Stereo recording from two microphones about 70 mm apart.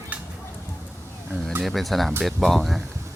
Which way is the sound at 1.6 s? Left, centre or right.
Centre.